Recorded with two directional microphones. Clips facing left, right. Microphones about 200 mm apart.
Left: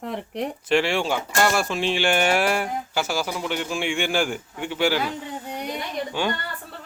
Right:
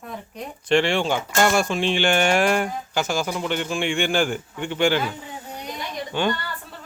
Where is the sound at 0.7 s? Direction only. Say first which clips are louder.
Right 2 dB; 5° left (ahead or behind).